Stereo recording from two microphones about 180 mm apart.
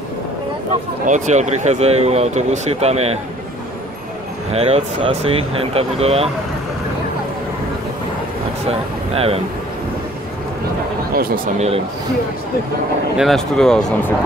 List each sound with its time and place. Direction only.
1.0 s speech: 45° right (ahead or behind)
4.5 s speech: 35° right (ahead or behind)
8.6 s speech: 35° right (ahead or behind)
11.1 s speech: 55° right (ahead or behind)
13.2 s speech: centre (ahead or behind)